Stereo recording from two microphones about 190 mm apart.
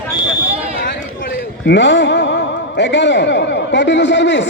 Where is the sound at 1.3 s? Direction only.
65° left (ahead or behind).